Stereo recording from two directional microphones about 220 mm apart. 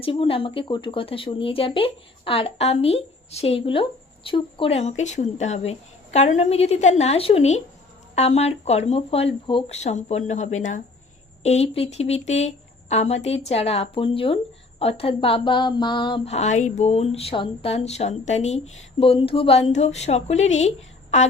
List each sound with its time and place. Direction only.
0.0 s speech: 25° left (ahead or behind)